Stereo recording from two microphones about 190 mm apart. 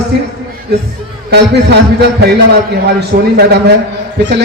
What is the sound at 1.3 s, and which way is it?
Speech, 60° right (ahead or behind).